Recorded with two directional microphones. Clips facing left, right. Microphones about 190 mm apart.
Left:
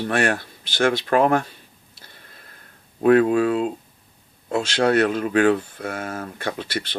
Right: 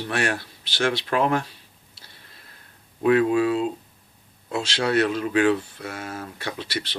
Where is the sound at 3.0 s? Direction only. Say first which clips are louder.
Left 3 dB; 50° left (ahead or behind).